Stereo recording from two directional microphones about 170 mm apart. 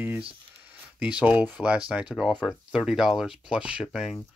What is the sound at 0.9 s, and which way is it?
Speech, 5° right (ahead or behind).